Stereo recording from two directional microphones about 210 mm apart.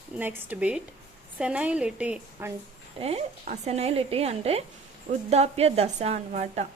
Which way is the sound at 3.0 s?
30° right (ahead or behind).